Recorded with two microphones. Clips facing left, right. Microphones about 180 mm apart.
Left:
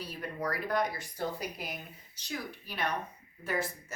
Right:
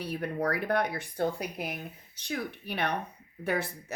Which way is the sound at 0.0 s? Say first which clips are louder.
Right 6 dB; 60° right (ahead or behind).